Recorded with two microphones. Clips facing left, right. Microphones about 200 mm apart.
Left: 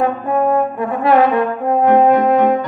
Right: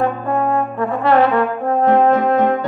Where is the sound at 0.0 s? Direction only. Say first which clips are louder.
Left 2 dB; 15° left (ahead or behind).